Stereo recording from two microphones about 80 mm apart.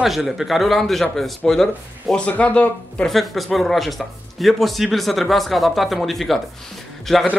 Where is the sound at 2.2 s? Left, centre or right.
Centre.